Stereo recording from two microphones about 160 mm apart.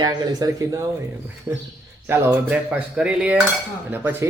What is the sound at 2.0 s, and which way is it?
A woman's voice, 15° right (ahead or behind).